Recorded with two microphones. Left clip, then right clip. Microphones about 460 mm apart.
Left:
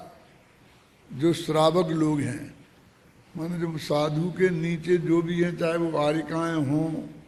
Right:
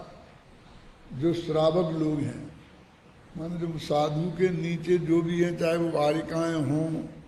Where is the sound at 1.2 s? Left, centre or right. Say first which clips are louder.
Left 3 dB; left.